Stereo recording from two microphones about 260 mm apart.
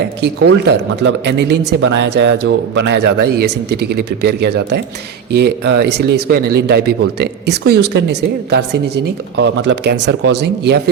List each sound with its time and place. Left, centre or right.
0.2 s speech: right